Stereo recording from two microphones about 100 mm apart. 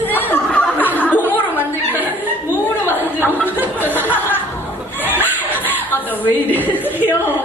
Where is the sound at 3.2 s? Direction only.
20° right (ahead or behind).